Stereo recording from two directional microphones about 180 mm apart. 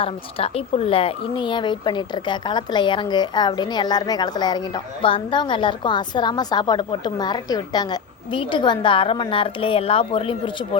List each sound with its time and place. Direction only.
0.0 s speech: 30° left (ahead or behind)